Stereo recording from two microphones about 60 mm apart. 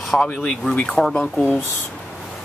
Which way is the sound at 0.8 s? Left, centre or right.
Centre.